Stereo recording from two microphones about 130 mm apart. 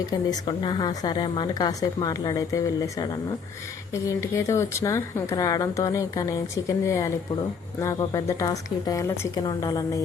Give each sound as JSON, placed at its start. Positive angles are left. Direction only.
{"t": 0.1, "sound": "a woman's voice", "side_deg": 35}